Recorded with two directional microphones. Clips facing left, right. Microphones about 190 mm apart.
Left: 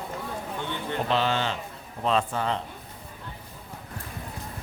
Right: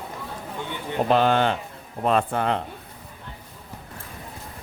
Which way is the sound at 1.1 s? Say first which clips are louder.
Right 7 dB; 50° right (ahead or behind).